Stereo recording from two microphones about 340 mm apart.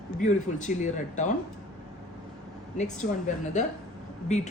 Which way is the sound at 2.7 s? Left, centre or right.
Left.